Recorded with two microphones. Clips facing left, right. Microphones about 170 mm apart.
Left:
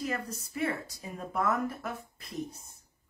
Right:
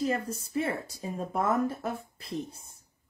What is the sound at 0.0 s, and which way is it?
Speech, 30° right (ahead or behind).